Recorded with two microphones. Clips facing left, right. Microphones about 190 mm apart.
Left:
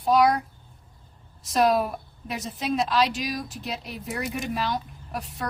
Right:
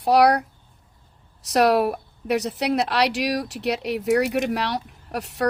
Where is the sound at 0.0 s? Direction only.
75° right (ahead or behind).